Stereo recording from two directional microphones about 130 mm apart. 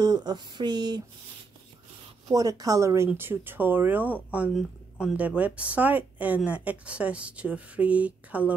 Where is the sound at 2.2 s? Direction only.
30° right (ahead or behind).